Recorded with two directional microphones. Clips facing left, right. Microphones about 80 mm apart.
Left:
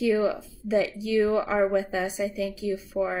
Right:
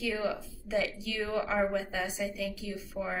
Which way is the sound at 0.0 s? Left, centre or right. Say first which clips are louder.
Left 9 dB; left.